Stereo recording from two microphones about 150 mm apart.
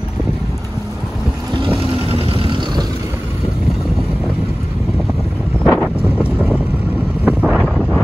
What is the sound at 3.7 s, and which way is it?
Vehicle, centre (ahead or behind).